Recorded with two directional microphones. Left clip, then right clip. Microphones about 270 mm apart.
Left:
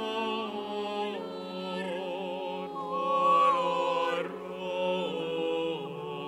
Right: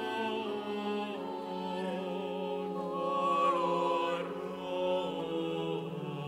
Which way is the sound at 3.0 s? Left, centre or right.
Left.